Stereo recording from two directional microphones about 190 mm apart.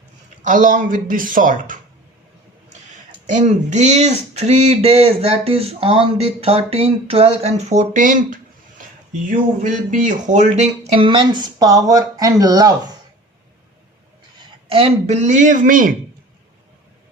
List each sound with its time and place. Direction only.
0.4 s speech: 45° right (ahead or behind); by 12.7 s 20° right (ahead or behind)
14.4 s speech: 30° right (ahead or behind)